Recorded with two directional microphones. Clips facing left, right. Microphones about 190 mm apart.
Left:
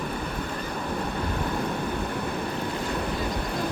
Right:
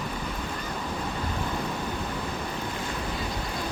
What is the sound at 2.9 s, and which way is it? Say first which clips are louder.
Vehicle: left 4 dB; 60° left (ahead or behind).